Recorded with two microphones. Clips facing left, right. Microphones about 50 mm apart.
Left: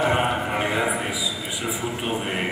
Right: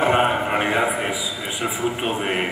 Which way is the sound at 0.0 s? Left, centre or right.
Right.